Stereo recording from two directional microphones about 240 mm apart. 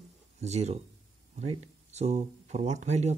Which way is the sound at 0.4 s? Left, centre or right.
Right.